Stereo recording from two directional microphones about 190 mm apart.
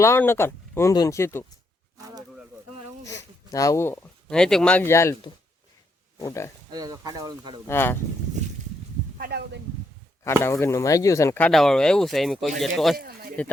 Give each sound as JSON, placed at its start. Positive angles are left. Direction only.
{"t": 0.0, "sound": "speech", "side_deg": 10}
{"t": 2.0, "sound": "a sound", "side_deg": -20}
{"t": 3.0, "sound": "speech", "side_deg": 15}
{"t": 6.7, "sound": "speech", "side_deg": -20}
{"t": 7.7, "sound": "speech", "side_deg": 10}
{"t": 9.1, "sound": "speech", "side_deg": -55}
{"t": 10.2, "sound": "speech", "side_deg": 15}
{"t": 13.0, "sound": "a sound", "side_deg": -50}